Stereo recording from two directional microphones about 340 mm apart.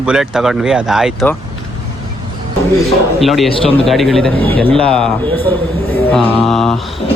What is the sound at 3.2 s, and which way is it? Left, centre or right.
Speech, centre.